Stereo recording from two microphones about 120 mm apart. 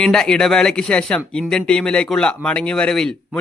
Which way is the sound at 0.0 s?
5° left (ahead or behind).